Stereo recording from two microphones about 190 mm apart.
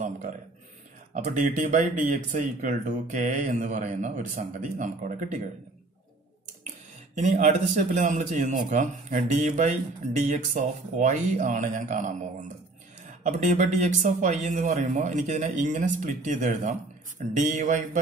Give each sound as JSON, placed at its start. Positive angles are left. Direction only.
{"t": 1.1, "sound": "speech", "side_deg": -40}
{"t": 7.2, "sound": "speech", "side_deg": -40}